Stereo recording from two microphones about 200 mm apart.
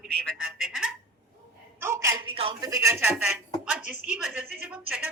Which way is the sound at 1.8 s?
15° right (ahead or behind).